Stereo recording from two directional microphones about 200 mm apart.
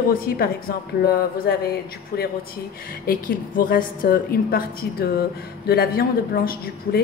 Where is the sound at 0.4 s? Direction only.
50° left (ahead or behind).